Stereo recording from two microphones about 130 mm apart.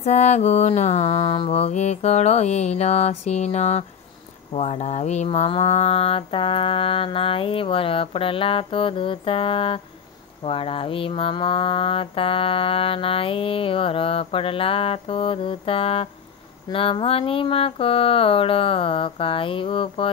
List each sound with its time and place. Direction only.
0.0 s music: 60° left (ahead or behind)
4.6 s mantra: 60° left (ahead or behind); by 20.1 s 40° left (ahead or behind)